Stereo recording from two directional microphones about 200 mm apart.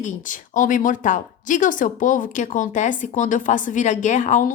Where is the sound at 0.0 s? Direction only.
40° left (ahead or behind).